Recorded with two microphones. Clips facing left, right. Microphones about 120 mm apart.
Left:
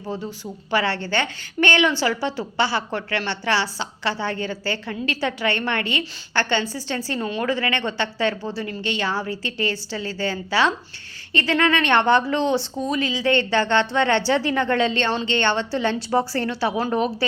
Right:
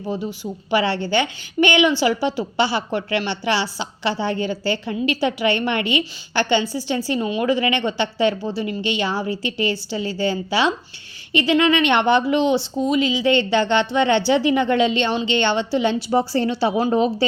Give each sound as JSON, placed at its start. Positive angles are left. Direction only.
{"t": 0.7, "sound": "a woman's voice", "side_deg": -15}